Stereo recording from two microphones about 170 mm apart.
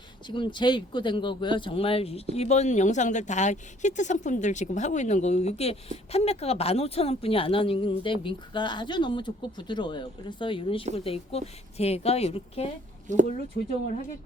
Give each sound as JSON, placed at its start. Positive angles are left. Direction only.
{"t": 0.3, "sound": "speech", "side_deg": 25}
{"t": 13.1, "sound": "speech", "side_deg": -45}